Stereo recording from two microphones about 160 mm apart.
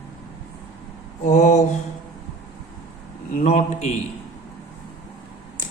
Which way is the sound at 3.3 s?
45° left (ahead or behind).